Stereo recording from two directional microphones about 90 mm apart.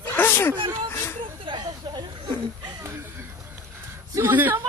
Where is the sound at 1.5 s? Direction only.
50° right (ahead or behind).